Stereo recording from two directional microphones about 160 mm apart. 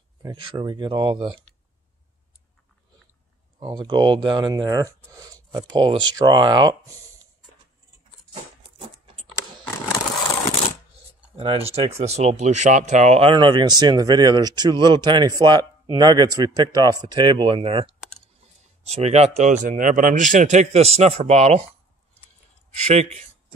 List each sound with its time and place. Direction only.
0.2 s speech: 30° right (ahead or behind)
3.5 s speech: 30° right (ahead or behind)
8.3 s a sound: 35° right (ahead or behind)
11.3 s a man's voice: 40° right (ahead or behind)
22.8 s a man's voice: 45° right (ahead or behind)